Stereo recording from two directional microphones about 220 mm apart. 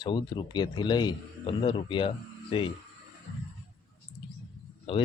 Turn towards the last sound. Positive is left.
turn(degrees=25)  # may be behind; listen again after turning